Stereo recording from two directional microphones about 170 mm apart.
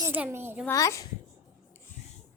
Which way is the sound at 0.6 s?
15° left (ahead or behind).